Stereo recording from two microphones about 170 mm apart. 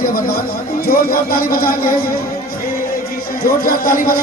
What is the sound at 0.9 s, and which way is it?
A man's voice, 60° left (ahead or behind).